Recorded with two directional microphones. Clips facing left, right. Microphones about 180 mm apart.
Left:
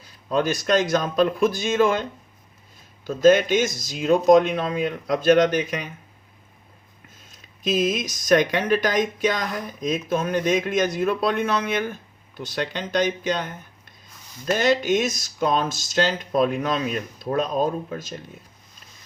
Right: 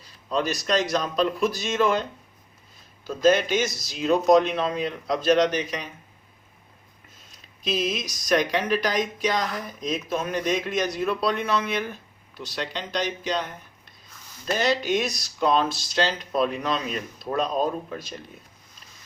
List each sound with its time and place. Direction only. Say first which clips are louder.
0.0 s speech: left 3 dB; 55° left (ahead or behind)
3.1 s speech: left 4 dB; 50° left (ahead or behind)
7.3 s speech: left 4 dB; 50° left (ahead or behind)
14.6 s speech: left 3 dB; 50° left (ahead or behind)